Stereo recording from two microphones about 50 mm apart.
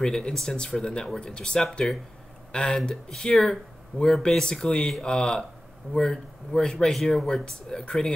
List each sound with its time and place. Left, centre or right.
0.0 s speech: centre